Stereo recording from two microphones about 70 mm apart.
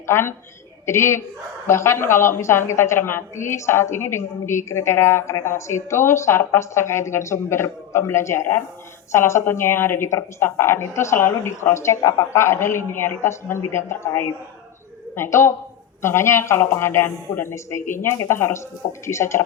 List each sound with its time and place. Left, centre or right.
0.1 s a woman's voice: left